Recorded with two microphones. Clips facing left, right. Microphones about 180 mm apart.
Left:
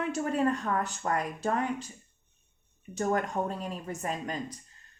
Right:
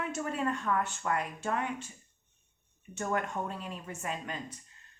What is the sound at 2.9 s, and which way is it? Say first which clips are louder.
Speech: left 4 dB; 35° left (ahead or behind).